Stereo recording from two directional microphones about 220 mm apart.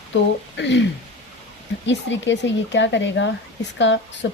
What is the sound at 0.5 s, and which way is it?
Speech, 50° left (ahead or behind).